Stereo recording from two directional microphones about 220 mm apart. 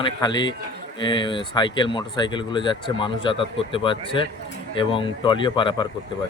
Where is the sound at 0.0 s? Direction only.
20° left (ahead or behind).